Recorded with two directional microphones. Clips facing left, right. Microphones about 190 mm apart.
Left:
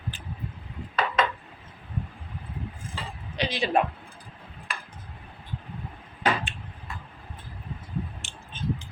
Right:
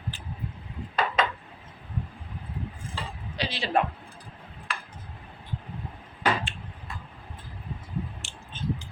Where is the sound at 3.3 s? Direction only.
20° left (ahead or behind).